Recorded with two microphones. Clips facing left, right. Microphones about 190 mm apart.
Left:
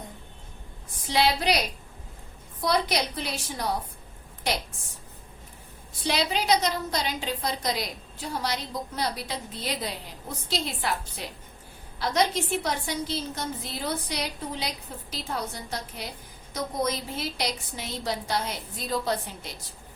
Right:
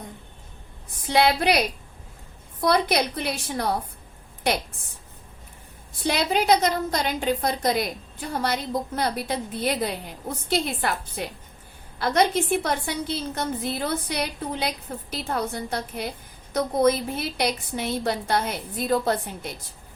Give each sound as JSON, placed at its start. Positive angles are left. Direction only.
{"t": 1.0, "sound": "a woman's voice", "side_deg": -55}
{"t": 6.1, "sound": "a woman's voice", "side_deg": -50}